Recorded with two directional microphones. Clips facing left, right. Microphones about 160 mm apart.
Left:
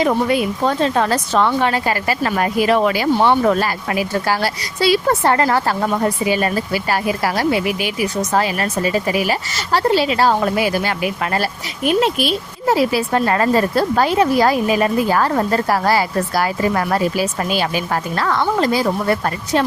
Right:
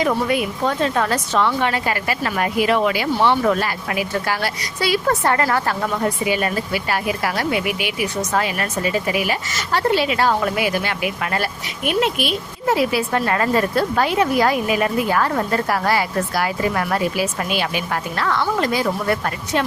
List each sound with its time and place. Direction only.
0.0 s speech: 30° left (ahead or behind)